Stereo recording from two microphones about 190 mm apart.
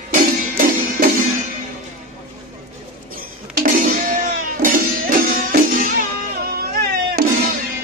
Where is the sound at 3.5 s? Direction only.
45° right (ahead or behind).